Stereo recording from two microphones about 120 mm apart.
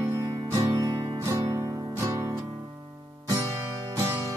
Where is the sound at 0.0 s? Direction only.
20° right (ahead or behind).